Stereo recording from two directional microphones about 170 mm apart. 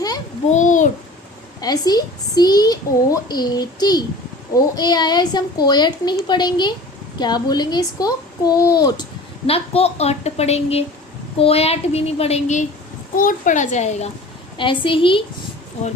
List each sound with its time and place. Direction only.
0.5 s a sound: 45° left (ahead or behind)
1.6 s a woman's voice: 25° left (ahead or behind)
9.5 s a woman's voice: 35° left (ahead or behind)
13.1 s a woman's voice: 50° left (ahead or behind)
14.6 s a woman's voice: 30° left (ahead or behind)